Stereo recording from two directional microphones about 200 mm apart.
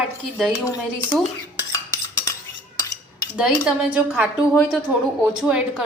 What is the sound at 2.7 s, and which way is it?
Cutlery, 15° left (ahead or behind).